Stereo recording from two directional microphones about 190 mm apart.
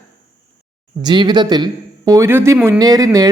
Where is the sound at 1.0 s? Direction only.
25° right (ahead or behind).